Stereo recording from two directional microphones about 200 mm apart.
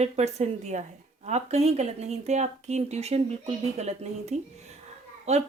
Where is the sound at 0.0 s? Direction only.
35° right (ahead or behind).